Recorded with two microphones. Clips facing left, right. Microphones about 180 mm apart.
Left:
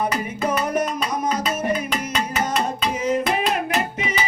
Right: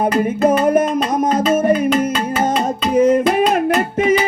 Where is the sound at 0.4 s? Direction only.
50° right (ahead or behind).